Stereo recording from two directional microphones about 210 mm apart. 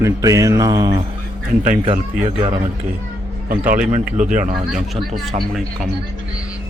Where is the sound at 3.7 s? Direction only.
40° right (ahead or behind).